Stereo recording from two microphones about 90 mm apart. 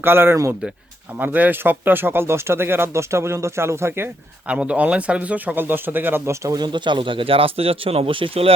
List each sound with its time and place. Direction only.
0.0 s speech: 25° right (ahead or behind)
4.4 s speech: 15° right (ahead or behind)
6.5 s speech: 55° right (ahead or behind); by 8.5 s 80° right